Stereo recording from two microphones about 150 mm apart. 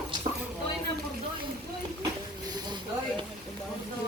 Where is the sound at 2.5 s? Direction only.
25° right (ahead or behind).